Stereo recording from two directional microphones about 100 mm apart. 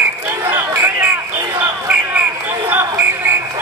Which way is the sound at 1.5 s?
15° right (ahead or behind).